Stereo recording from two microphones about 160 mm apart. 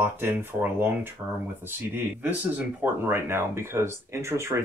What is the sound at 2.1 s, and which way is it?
Speech, 10° right (ahead or behind).